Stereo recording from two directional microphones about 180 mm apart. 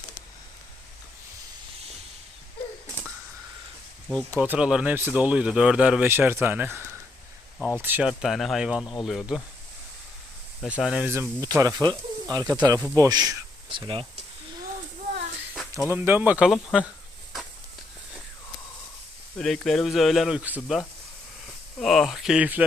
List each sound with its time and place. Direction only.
4.1 s speech: 10° left (ahead or behind)
4.4 s speech: 10° right (ahead or behind)
10.6 s speech: 5° right (ahead or behind); by 14.1 s 30° right (ahead or behind)
15.9 s speech: 10° right (ahead or behind)
19.4 s speech: centre (ahead or behind)